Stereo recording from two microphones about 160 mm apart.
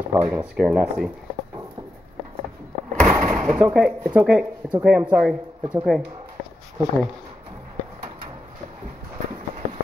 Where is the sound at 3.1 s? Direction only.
10° right (ahead or behind).